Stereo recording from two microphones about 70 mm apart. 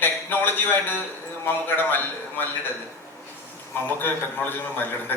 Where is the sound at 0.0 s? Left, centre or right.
Left.